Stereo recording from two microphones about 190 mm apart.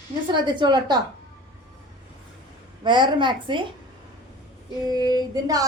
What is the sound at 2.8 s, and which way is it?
Speech, 25° right (ahead or behind).